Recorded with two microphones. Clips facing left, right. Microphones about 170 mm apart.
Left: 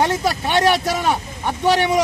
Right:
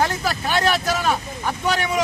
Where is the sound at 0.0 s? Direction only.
25° left (ahead or behind).